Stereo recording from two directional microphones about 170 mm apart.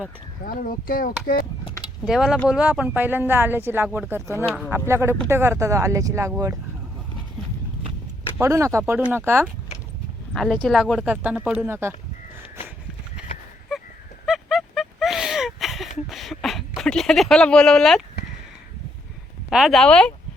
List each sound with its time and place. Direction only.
0.4 s speech: 55° left (ahead or behind)
2.0 s speech: 5° right (ahead or behind)
8.4 s speech: 15° right (ahead or behind)
10.3 s speech: centre (ahead or behind); by 11.9 s 15° right (ahead or behind)
13.2 s horse: 5° right (ahead or behind)
13.7 s a sound: centre (ahead or behind)
19.5 s speech: centre (ahead or behind)